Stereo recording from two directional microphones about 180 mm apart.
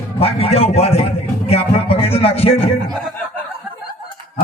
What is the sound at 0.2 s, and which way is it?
A man's voice, 30° left (ahead or behind).